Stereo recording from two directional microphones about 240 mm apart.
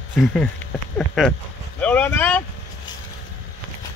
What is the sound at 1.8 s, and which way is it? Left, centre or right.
Speech, centre.